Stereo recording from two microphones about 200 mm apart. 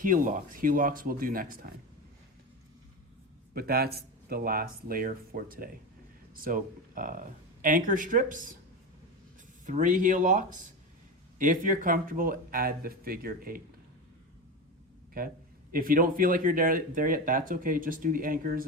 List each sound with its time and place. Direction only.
0.0 s speech: 40° right (ahead or behind)
3.5 s speech: 50° right (ahead or behind)
9.6 s speech: 40° right (ahead or behind)
15.2 s speech: 45° right (ahead or behind)